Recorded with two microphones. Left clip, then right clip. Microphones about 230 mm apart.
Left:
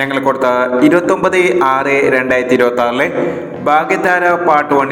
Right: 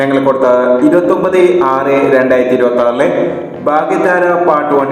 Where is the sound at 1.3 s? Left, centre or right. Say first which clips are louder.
Right 2 dB; left.